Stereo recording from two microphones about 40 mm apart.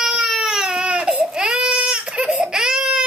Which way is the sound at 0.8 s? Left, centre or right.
Right.